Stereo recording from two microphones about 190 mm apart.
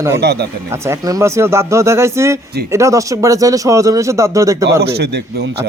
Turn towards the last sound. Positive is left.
turn(degrees=-60)  # may be behind; listen again after turning